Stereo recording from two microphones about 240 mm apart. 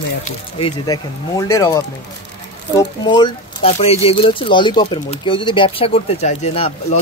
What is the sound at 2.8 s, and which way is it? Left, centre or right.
Speech, centre.